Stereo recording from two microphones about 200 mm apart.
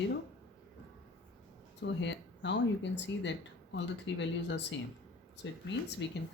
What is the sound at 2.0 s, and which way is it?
Speech, 60° left (ahead or behind).